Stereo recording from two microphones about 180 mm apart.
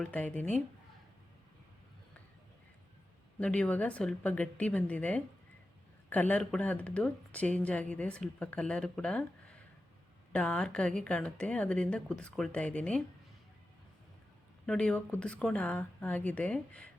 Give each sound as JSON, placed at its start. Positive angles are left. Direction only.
{"t": 0.0, "sound": "speech", "side_deg": 5}
{"t": 3.4, "sound": "a woman's voice", "side_deg": 5}
{"t": 14.7, "sound": "speech", "side_deg": 5}